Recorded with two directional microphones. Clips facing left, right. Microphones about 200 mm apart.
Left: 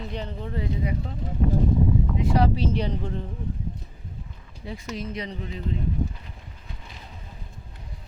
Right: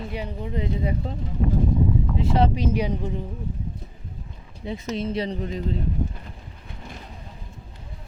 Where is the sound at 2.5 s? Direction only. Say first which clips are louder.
Right 2 dB; 10° right (ahead or behind).